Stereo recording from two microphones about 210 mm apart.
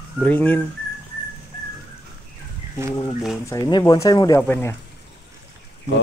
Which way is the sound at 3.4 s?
20° left (ahead or behind).